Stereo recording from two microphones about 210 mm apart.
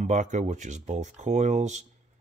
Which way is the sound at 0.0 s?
35° right (ahead or behind).